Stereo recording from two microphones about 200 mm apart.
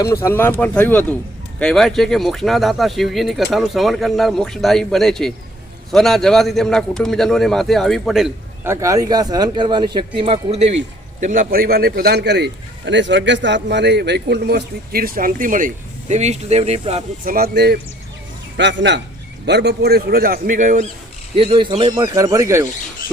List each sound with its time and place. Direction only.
0.0 s speech: 15° left (ahead or behind); by 8.3 s centre (ahead or behind)
8.6 s speech: 15° right (ahead or behind); by 10.8 s 30° right (ahead or behind)
11.2 s a man's voice: 40° right (ahead or behind)
17.3 s a man's voice: 50° right (ahead or behind)
21.3 s speech: 25° right (ahead or behind)